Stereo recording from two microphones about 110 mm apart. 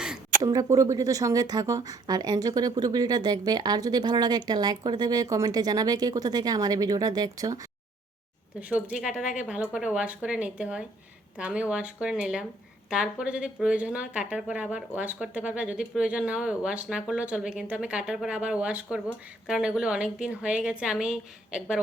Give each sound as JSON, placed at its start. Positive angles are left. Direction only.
{"t": 0.4, "sound": "speech", "side_deg": -30}
{"t": 8.7, "sound": "speech", "side_deg": -10}